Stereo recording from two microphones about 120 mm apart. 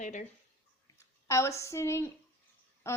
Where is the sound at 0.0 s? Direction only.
90° left.